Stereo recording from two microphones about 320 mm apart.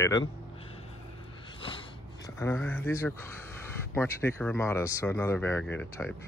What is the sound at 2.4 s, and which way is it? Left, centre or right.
Speech, centre.